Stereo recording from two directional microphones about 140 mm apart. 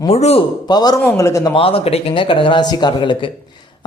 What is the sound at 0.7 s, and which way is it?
Speech, 30° left (ahead or behind).